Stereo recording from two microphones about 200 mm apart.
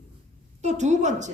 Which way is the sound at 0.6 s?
35° right (ahead or behind).